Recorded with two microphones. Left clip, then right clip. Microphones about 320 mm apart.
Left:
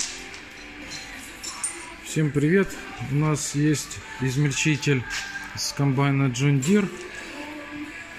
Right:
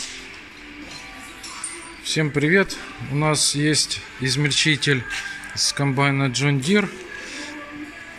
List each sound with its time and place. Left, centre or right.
2.1 s a man's voice: centre